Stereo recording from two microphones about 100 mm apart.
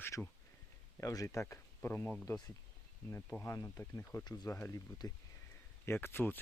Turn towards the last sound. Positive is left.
turn(degrees=20)  # may be behind; listen again after turning